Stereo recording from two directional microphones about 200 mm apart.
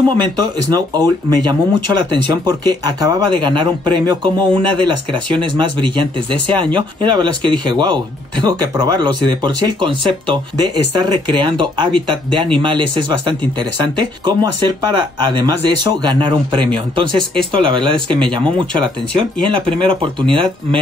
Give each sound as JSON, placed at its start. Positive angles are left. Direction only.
{"t": 0.2, "sound": "speech", "side_deg": -20}